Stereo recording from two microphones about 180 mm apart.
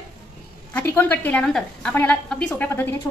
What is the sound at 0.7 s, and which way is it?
A woman's voice, 10° left (ahead or behind).